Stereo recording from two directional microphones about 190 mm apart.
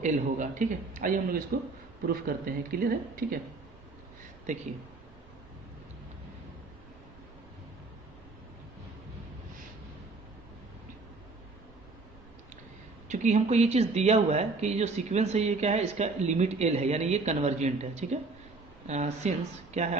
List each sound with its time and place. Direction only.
0.0 s a man's voice: 40° right (ahead or behind)
13.1 s speech: 40° right (ahead or behind)